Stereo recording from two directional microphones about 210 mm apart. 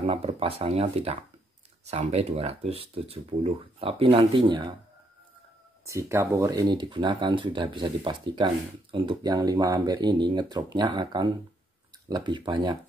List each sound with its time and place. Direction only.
0.0 s speech: 30° right (ahead or behind)
5.9 s speech: 15° right (ahead or behind)